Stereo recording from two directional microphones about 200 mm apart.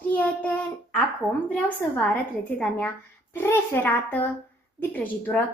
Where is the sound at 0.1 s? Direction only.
5° left (ahead or behind).